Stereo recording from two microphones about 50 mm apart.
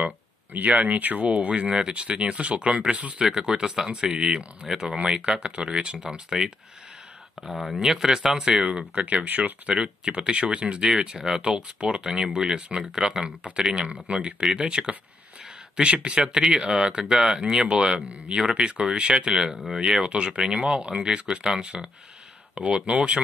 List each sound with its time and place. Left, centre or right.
0.0 s speech: right
3.3 s speech: centre
7.4 s speech: centre
8.6 s speech: right
10.8 s speech: centre
17.9 s speech: right
18.4 s speech: centre
19.3 s speech: centre